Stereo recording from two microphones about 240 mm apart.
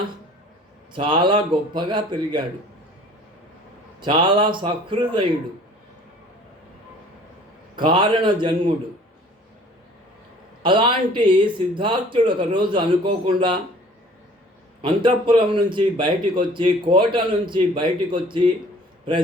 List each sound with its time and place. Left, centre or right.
0.9 s a man's voice: right
4.0 s a man's voice: centre
7.8 s a man's voice: centre
10.6 s a man's voice: centre
14.8 s a man's voice: centre